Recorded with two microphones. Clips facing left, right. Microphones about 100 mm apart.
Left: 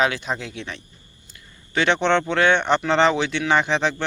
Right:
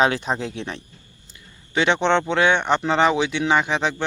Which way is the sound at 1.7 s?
15° right (ahead or behind).